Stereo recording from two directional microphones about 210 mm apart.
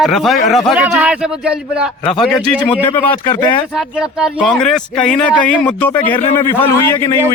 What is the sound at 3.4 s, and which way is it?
Speech, 20° left (ahead or behind).